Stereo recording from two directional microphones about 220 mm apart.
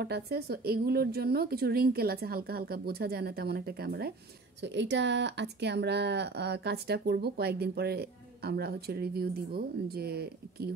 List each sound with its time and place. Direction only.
0.0 s speech: 45° right (ahead or behind)